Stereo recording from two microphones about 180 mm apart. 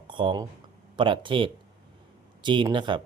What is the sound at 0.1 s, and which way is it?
Speech, 25° right (ahead or behind).